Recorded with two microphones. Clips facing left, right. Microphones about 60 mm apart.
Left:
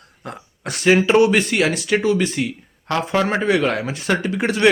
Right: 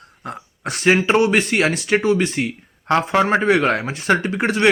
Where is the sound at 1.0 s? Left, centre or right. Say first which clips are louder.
Left 1 dB; right.